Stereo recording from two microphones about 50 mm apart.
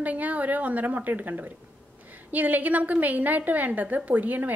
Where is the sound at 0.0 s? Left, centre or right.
Right.